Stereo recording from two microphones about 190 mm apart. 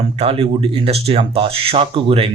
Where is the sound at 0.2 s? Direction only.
30° right (ahead or behind).